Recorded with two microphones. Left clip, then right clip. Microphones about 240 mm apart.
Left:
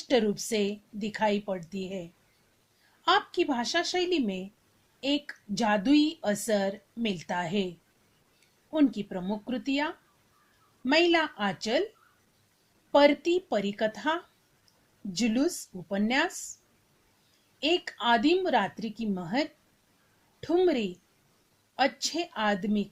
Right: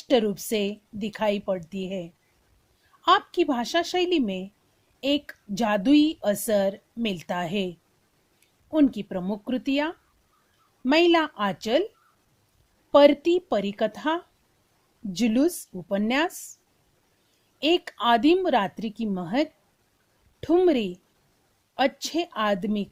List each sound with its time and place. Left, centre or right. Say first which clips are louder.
0.1 s a woman's voice: right 4 dB; right
8.7 s a woman's voice: right 4 dB; right
12.9 s a woman's voice: right 5 dB; right
17.6 s a woman's voice: right 4 dB; right